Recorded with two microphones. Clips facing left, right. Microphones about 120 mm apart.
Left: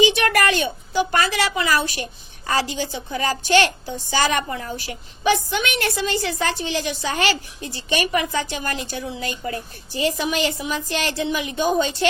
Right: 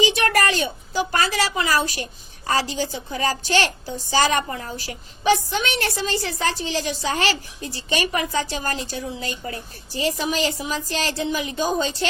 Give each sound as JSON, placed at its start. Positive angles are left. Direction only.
{"t": 0.0, "sound": "a child's voice", "side_deg": -40}